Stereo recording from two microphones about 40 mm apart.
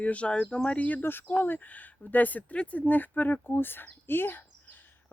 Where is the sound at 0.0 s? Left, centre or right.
Left.